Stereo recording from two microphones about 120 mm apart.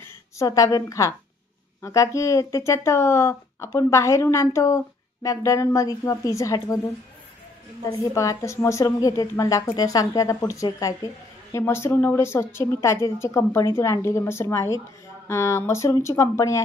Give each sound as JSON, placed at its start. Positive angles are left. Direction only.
{"t": 0.0, "sound": "a woman's voice", "side_deg": 25}